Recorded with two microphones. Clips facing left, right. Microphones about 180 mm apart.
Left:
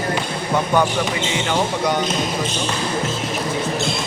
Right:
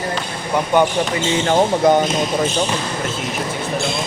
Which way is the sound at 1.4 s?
45° right (ahead or behind).